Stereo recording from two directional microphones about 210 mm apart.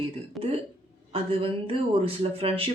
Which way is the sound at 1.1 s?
25° right (ahead or behind).